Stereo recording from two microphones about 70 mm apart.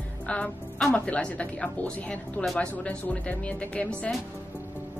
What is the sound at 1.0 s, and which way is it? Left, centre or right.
A woman's voice, centre.